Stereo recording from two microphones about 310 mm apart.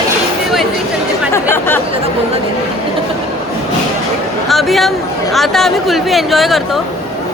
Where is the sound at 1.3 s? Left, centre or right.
Centre.